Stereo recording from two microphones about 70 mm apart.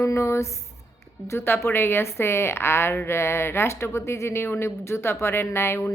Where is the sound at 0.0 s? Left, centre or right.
Left.